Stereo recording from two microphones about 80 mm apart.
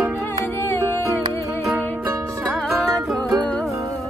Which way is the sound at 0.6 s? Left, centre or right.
Left.